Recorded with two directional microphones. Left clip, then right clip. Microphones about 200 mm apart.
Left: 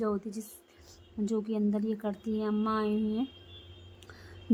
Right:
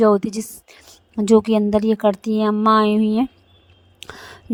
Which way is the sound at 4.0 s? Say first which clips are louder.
Right 18 dB; 50° right (ahead or behind).